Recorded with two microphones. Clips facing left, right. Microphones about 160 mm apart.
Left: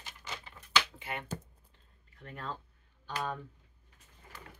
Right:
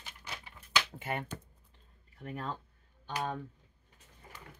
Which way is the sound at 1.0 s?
45° right (ahead or behind).